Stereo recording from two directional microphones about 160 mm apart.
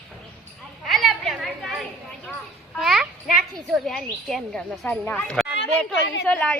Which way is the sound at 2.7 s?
5° right (ahead or behind).